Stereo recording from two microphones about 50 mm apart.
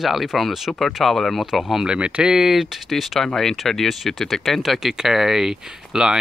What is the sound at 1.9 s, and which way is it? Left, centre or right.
Speech, right.